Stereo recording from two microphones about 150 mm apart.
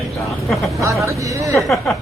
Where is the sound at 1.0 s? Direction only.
20° right (ahead or behind).